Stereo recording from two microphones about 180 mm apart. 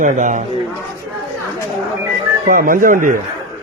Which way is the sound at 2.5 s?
50° right (ahead or behind).